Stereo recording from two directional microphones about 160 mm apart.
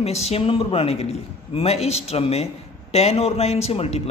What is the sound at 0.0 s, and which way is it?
A man's voice, 40° left (ahead or behind).